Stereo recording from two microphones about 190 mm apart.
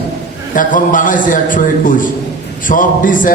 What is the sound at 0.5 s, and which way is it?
A man's voice, 45° left (ahead or behind).